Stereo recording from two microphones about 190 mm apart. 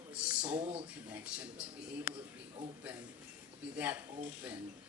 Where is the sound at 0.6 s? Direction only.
30° right (ahead or behind).